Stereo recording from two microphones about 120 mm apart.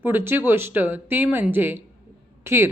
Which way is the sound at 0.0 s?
20° right (ahead or behind).